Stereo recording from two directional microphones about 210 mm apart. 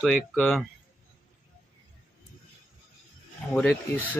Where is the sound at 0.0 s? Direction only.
5° left (ahead or behind).